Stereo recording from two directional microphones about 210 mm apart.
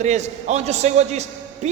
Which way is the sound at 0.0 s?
35° right (ahead or behind).